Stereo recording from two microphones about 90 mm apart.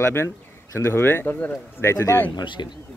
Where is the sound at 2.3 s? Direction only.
60° left (ahead or behind).